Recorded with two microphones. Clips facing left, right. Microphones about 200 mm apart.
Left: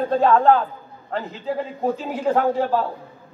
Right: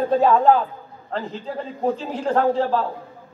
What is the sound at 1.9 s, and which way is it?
Speech, 5° left (ahead or behind).